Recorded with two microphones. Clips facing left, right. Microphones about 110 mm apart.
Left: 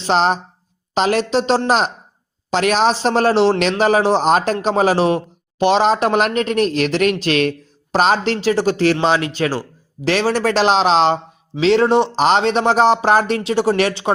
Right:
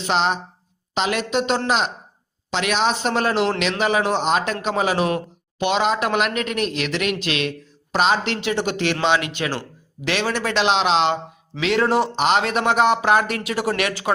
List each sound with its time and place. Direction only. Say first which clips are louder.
0.0 s speech: left 5 dB; 40° left (ahead or behind)